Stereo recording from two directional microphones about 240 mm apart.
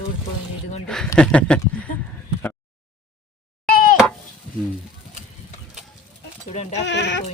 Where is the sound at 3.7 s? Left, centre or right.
Left.